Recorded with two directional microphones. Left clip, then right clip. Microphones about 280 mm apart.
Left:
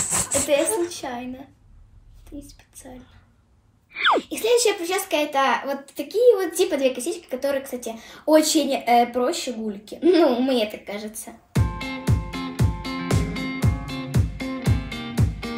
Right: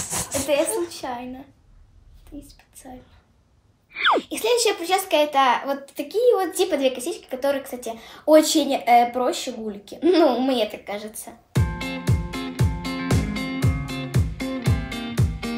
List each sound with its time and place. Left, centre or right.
0.0 s a woman's voice: centre
3.9 s speech: centre